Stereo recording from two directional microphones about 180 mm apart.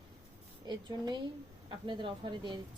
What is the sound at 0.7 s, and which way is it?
A woman's voice, 25° right (ahead or behind).